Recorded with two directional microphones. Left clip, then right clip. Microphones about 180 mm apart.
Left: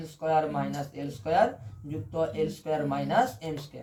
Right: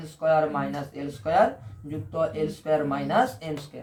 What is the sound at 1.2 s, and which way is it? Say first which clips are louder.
A man's voice: right 3 dB; 20° right (ahead or behind).